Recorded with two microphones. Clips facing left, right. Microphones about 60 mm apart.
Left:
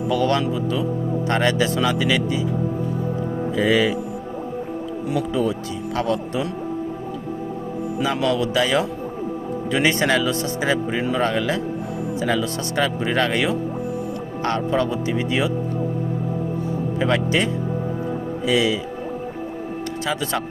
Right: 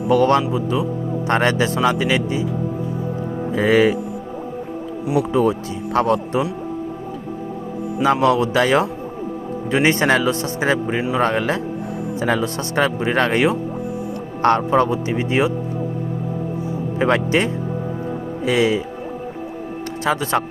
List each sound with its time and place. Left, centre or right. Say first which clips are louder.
0.1 s speech: right 6 dB; right
0.5 s speech: right 2 dB; right
1.3 s speech: right 3 dB; right
3.5 s speech: right 4 dB; right
5.3 s speech: right 4 dB; right
8.0 s speech: right 6 dB; right
14.7 s speech: right 4 dB; right
17.0 s speech: right 3 dB; right
20.1 s speech: right 6 dB; right